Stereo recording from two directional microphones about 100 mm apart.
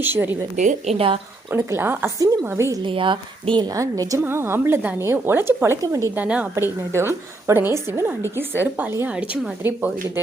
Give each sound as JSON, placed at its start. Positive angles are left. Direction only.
{"t": 0.0, "sound": "a woman's voice", "side_deg": -20}
{"t": 0.9, "sound": "speech", "side_deg": -70}
{"t": 1.5, "sound": "a woman's voice", "side_deg": -25}
{"t": 2.8, "sound": "a woman's voice", "side_deg": -55}
{"t": 3.7, "sound": "a woman's voice", "side_deg": -35}
{"t": 4.2, "sound": "a woman's voice", "side_deg": -25}
{"t": 6.6, "sound": "a woman's voice", "side_deg": -25}